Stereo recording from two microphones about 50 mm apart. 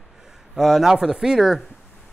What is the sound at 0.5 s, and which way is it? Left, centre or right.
Speech, centre.